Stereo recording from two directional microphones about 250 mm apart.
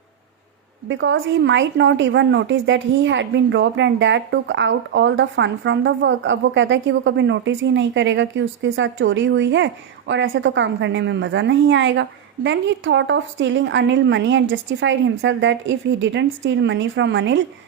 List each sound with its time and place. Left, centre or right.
0.9 s a woman's voice: right